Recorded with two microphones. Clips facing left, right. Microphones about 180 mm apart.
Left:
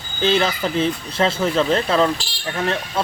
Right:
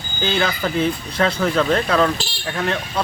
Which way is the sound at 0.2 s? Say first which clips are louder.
Left 2 dB; 25° left (ahead or behind).